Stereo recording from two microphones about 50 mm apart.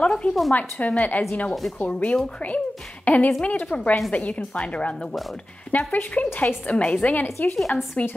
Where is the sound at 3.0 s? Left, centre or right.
Left.